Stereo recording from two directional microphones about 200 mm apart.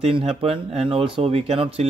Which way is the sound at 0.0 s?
30° right (ahead or behind).